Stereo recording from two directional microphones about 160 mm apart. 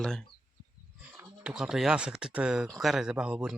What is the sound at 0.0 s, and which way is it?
Speech, 5° left (ahead or behind).